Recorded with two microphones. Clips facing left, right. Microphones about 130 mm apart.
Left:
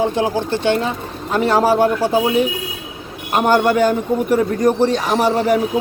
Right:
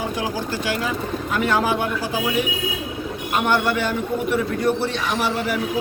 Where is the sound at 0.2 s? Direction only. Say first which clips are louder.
Left 7 dB; 25° left (ahead or behind).